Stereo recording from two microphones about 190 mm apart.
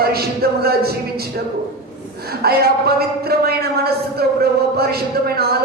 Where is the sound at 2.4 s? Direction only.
55° right (ahead or behind).